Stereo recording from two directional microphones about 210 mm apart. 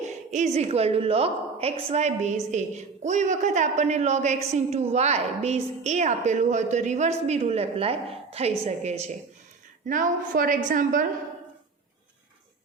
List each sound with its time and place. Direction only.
0.0 s a woman's voice: 35° right (ahead or behind)